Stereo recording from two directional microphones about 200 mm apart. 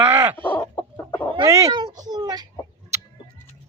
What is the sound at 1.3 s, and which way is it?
Speech, 20° right (ahead or behind).